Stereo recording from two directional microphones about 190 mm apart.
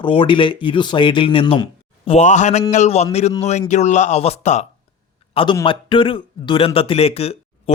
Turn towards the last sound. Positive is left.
turn(degrees=30)  # may be behind; listen again after turning